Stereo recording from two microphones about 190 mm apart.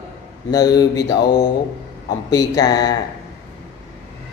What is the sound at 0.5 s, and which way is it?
Speech, 20° left (ahead or behind).